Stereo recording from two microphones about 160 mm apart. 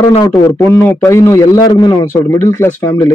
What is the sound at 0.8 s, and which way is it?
A man's voice, 15° left (ahead or behind).